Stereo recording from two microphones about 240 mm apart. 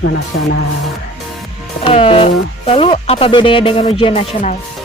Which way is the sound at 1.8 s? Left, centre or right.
Left.